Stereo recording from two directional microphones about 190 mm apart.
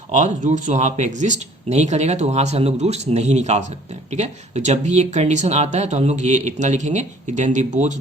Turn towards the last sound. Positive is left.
turn(degrees=-40)  # may be behind; listen again after turning